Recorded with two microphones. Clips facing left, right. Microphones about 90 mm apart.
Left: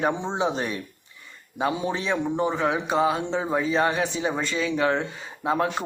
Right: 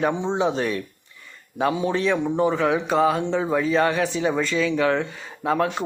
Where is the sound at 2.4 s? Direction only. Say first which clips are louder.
Right 3 dB; 30° left (ahead or behind).